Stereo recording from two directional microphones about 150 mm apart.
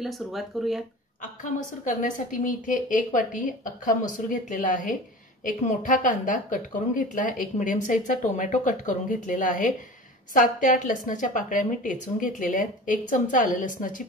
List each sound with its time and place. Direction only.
0.0 s speech: centre (ahead or behind)
1.9 s a woman's voice: 60° left (ahead or behind)